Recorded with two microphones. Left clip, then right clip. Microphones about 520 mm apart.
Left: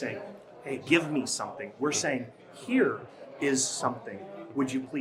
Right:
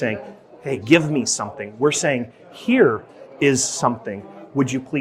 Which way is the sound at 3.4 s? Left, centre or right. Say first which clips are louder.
Right 10 dB; right.